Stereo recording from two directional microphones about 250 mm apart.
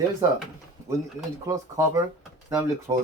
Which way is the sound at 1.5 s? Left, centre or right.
Centre.